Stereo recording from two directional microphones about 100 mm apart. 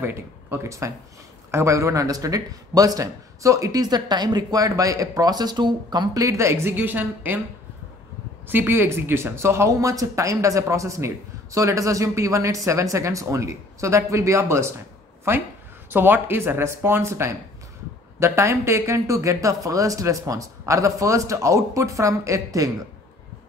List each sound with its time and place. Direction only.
0.0 s a man's voice: 25° right (ahead or behind)
8.5 s a man's voice: 20° right (ahead or behind)